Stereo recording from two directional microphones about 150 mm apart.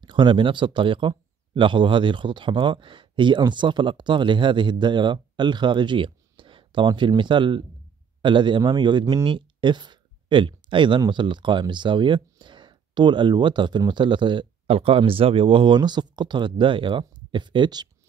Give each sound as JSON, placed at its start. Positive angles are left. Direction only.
{"t": 0.0, "sound": "speech", "side_deg": -30}